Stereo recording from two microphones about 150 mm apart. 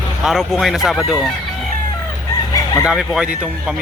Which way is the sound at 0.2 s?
Centre (ahead or behind).